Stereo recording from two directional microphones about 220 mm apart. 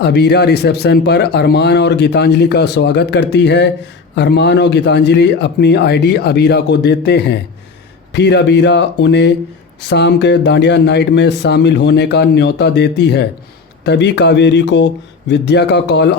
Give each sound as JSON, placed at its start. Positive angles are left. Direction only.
{"t": 0.0, "sound": "speech", "side_deg": 50}